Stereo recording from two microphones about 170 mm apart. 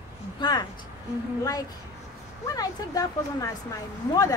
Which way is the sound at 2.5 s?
20° left (ahead or behind).